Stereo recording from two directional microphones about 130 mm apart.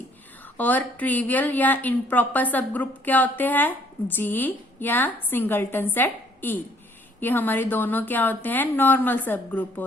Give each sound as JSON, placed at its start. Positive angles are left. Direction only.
{"t": 0.5, "sound": "a woman's voice", "side_deg": 15}